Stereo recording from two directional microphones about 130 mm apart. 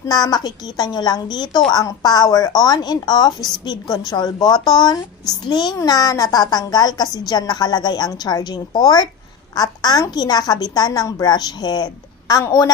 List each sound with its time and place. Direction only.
0.1 s a woman's voice: 30° left (ahead or behind)